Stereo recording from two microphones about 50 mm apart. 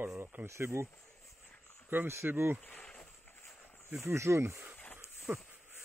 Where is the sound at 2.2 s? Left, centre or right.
Right.